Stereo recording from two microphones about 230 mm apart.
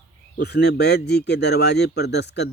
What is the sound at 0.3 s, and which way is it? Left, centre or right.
Speech, left.